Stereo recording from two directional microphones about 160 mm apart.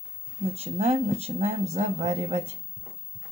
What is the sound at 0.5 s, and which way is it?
Speech, 40° right (ahead or behind).